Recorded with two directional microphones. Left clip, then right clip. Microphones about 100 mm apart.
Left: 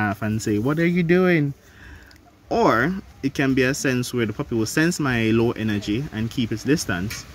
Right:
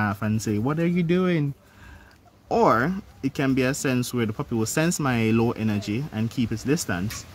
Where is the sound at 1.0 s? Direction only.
10° right (ahead or behind).